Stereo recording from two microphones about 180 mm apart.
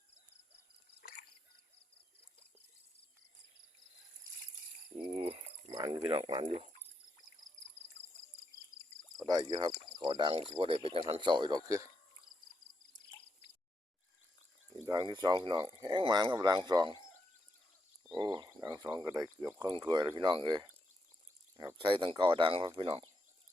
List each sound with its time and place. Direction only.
5.1 s a sound: 35° right (ahead or behind)
5.7 s speech: 25° right (ahead or behind)
9.2 s speech: 20° right (ahead or behind)
14.8 s speech: 20° right (ahead or behind)
18.2 s speech: 20° right (ahead or behind)
21.8 s speech: 30° right (ahead or behind)